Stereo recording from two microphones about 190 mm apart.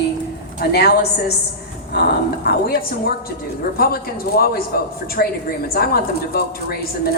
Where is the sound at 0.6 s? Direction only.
55° left (ahead or behind).